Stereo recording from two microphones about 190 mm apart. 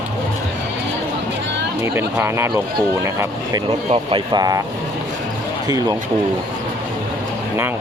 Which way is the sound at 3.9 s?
25° right (ahead or behind).